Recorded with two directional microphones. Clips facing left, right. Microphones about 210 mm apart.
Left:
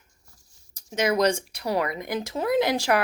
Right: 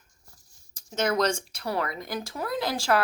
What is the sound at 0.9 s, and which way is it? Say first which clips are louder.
Speech: left 3 dB; 10° left (ahead or behind).